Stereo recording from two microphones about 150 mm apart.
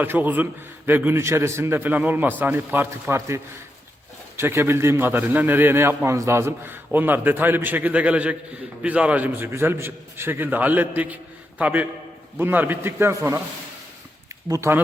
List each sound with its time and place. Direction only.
0.0 s a man's voice: 10° right (ahead or behind)
14.5 s speech: 20° right (ahead or behind)